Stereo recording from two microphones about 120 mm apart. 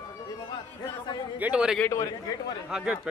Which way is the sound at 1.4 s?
10° right (ahead or behind).